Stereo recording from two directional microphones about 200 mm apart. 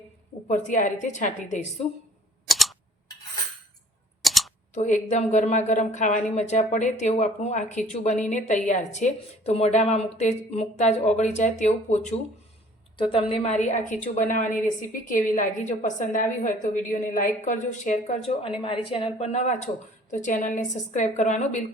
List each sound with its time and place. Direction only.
0.4 s a woman's voice: 40° left (ahead or behind)
2.5 s a sound: centre (ahead or behind)
4.2 s camera: centre (ahead or behind)
4.7 s a woman's voice: 35° left (ahead or behind)